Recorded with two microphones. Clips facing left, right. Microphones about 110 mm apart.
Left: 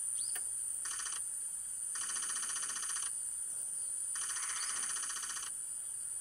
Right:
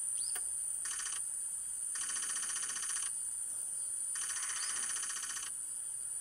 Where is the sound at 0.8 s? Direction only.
25° left (ahead or behind).